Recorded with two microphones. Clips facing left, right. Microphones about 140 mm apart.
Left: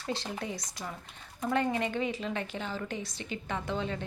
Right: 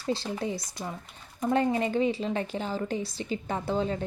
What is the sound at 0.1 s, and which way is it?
A woman's voice, 30° right (ahead or behind).